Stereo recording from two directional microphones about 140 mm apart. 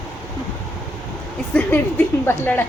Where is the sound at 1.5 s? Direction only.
15° left (ahead or behind).